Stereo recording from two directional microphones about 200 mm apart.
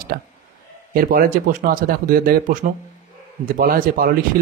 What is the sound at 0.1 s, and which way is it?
Speech, 50° right (ahead or behind).